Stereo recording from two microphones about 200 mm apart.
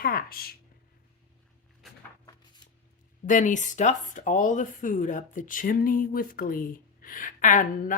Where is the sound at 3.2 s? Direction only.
40° left (ahead or behind).